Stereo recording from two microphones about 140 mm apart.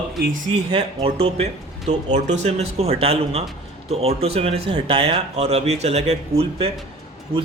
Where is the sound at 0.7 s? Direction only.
40° right (ahead or behind).